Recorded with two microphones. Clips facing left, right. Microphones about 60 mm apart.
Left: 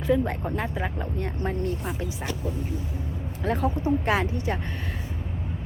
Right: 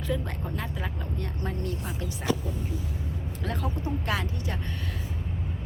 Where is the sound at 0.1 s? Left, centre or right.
Left.